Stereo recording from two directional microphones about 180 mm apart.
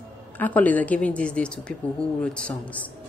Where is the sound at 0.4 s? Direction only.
10° left (ahead or behind).